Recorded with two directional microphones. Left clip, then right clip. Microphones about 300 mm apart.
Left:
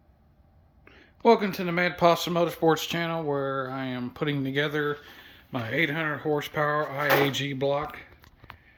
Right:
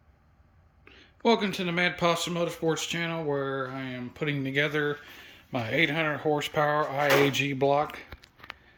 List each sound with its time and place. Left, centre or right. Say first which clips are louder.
0.9 s a man's voice: left 4 dB; centre